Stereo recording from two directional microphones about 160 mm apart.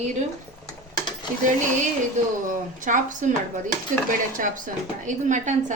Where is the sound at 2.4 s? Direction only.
55° right (ahead or behind).